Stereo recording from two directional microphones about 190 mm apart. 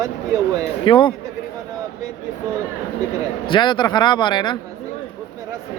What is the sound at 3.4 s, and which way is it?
Speech, 25° left (ahead or behind).